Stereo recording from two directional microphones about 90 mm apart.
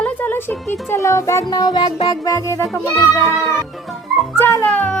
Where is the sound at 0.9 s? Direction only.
35° left (ahead or behind).